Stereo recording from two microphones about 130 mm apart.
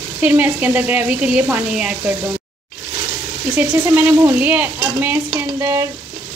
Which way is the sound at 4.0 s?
15° right (ahead or behind).